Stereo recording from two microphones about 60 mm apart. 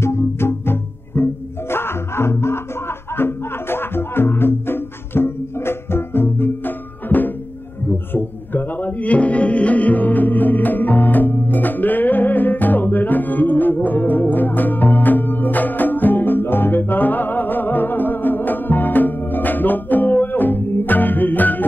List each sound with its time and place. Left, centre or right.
0.0 s music: left